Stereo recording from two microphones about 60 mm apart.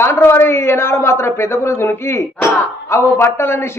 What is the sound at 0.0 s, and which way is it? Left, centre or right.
A man's voice, left.